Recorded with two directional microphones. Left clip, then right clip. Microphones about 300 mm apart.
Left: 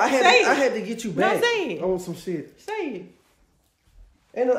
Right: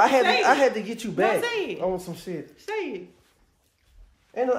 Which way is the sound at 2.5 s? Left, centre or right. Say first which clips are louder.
Left 1 dB; centre.